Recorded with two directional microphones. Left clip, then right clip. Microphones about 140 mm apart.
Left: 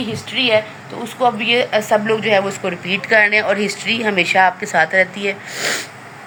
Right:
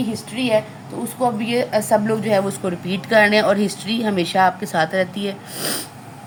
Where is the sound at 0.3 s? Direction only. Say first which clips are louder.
Left 4 dB; 20° right (ahead or behind).